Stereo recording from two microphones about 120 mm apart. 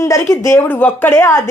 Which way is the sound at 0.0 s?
25° left (ahead or behind).